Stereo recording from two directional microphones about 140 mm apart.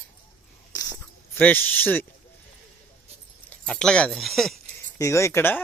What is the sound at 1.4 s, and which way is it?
Speech, 10° left (ahead or behind).